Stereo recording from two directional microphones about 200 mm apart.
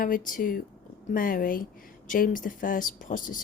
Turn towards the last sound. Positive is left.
turn(degrees=40)  # may be behind; listen again after turning